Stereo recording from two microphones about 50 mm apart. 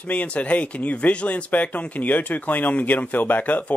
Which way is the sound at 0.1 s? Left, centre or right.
Left.